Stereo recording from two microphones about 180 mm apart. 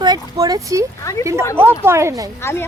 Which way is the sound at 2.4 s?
15° left (ahead or behind).